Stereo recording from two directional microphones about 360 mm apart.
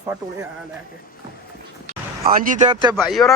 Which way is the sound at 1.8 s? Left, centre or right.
Right.